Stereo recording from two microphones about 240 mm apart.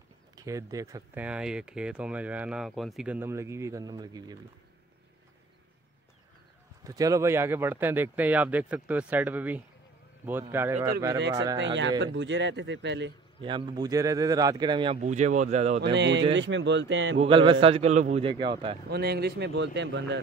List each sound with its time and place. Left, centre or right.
0.4 s speech: centre
6.8 s speech: centre
11.6 s speech: right
13.4 s speech: centre
15.8 s speech: right
17.2 s speech: right
18.9 s speech: right